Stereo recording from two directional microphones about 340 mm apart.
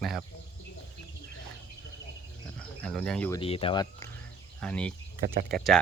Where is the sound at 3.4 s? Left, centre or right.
Centre.